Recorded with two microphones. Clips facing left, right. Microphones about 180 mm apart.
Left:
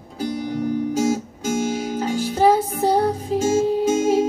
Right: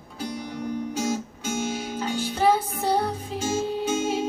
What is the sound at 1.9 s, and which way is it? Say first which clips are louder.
Music: left 6 dB; 40° left (ahead or behind).